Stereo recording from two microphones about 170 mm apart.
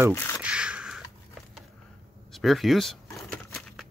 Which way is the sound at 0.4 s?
5° right (ahead or behind).